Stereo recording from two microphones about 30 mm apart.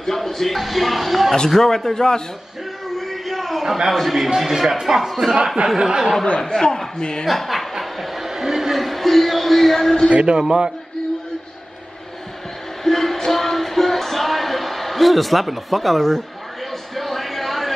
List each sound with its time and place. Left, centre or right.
0.0 s speech: centre
1.6 s speech: centre
3.0 s a sound: centre
3.6 s speech: centre
3.9 s a man's voice: centre
5.8 s speech: right
6.4 s a man's voice: left
7.2 s chuckle: centre
8.3 s a sound: centre
8.7 s a sound: centre
10.0 s speech: right
10.4 s speech: right
12.8 s music: centre
16.9 s a sound: centre